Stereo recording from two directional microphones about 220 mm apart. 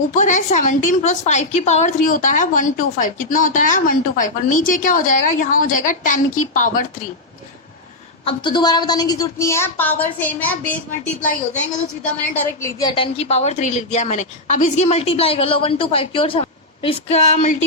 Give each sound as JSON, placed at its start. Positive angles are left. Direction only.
{"t": 0.1, "sound": "a woman's voice", "side_deg": 35}
{"t": 8.2, "sound": "a woman's voice", "side_deg": 25}
{"t": 12.6, "sound": "a woman's voice", "side_deg": 20}